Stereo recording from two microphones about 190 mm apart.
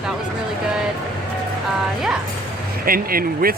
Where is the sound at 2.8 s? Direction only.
50° right (ahead or behind).